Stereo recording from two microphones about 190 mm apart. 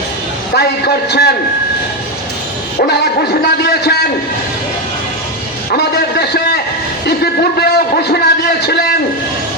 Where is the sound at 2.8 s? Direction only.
55° left (ahead or behind).